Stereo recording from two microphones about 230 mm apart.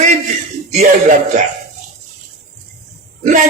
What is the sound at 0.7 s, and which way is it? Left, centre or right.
Speech, right.